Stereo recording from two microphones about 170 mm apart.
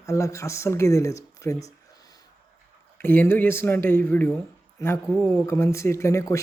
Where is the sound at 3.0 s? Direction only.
10° left (ahead or behind).